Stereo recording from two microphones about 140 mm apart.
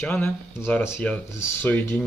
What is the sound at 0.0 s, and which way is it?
Speech, 15° left (ahead or behind).